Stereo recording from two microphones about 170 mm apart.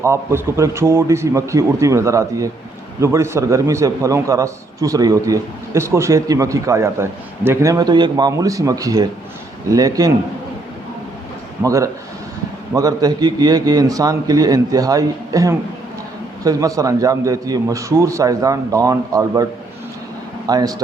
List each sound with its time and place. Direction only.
0.0 s a man's voice: 15° right (ahead or behind)
11.6 s a man's voice: 20° right (ahead or behind)
20.5 s a man's voice: 20° right (ahead or behind)